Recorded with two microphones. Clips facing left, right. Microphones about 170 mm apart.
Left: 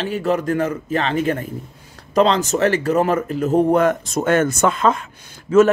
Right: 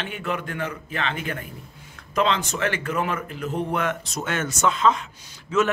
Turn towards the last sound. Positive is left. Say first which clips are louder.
# left 9 dB
turn(degrees=50)  # may be behind; listen again after turning